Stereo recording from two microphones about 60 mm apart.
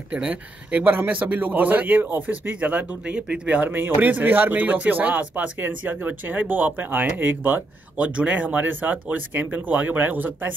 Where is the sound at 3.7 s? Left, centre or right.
Right.